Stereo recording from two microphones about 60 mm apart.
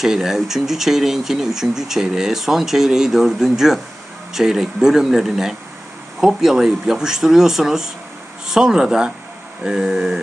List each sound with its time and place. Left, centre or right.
0.0 s speech: centre